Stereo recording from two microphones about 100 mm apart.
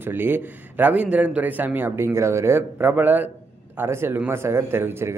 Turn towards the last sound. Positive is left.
turn(degrees=-25)  # may be behind; listen again after turning